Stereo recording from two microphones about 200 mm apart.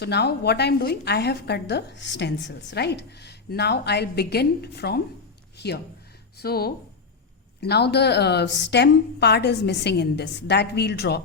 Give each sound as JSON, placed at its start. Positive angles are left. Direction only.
{"t": 0.0, "sound": "a woman's voice", "side_deg": 55}